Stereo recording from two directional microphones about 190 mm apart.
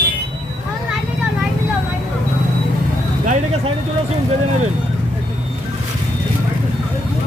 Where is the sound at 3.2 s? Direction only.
40° right (ahead or behind).